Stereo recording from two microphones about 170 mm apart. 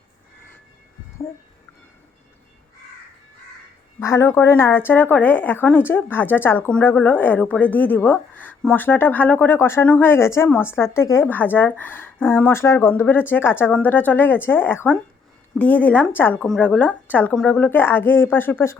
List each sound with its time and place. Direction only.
4.0 s speech: 15° left (ahead or behind)